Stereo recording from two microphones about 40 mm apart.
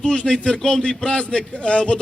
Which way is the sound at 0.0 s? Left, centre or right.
Left.